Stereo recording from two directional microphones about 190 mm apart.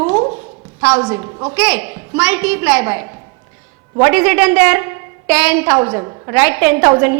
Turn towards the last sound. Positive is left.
turn(degrees=-10)  # may be behind; listen again after turning